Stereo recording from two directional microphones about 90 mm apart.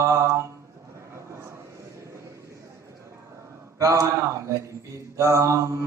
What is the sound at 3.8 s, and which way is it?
Speech, 35° right (ahead or behind).